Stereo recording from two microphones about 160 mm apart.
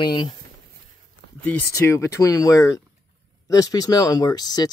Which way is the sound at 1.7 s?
20° left (ahead or behind).